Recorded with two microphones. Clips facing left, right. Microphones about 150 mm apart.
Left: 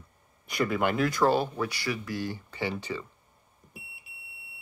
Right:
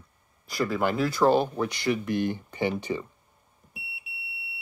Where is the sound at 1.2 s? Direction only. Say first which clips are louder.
Right 3 dB; 10° right (ahead or behind).